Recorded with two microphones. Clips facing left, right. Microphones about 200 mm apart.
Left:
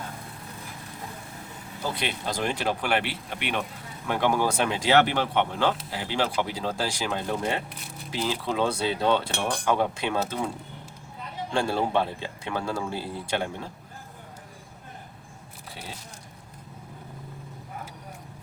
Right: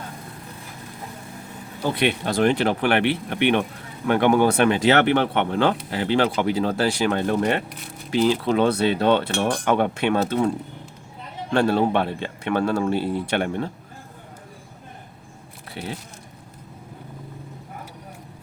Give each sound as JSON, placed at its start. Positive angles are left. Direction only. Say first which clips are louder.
{"t": 1.8, "sound": "speech", "louder": "right 8 dB", "side_deg": -60}
{"t": 11.5, "sound": "speech", "louder": "right 6 dB", "side_deg": -65}